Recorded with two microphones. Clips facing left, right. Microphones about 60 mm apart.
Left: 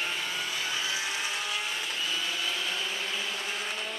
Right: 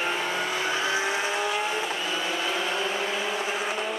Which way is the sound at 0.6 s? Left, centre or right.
Right.